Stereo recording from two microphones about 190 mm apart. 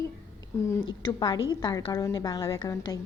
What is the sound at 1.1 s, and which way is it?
Speech, 25° left (ahead or behind).